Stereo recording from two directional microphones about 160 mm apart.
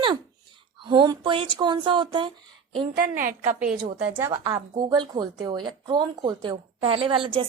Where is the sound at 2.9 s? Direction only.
60° right (ahead or behind).